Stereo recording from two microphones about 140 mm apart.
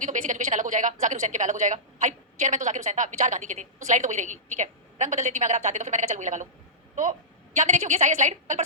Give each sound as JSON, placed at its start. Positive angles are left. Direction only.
{"t": 0.0, "sound": "a woman's voice", "side_deg": -60}